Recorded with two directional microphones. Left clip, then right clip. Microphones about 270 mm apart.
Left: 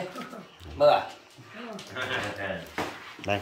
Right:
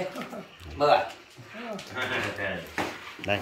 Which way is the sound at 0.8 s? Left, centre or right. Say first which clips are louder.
Left 2 dB; centre.